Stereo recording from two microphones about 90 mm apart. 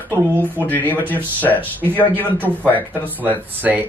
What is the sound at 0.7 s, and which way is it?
Speech, 20° left (ahead or behind).